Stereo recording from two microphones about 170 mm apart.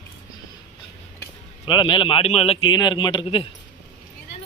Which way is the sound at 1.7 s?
30° left (ahead or behind).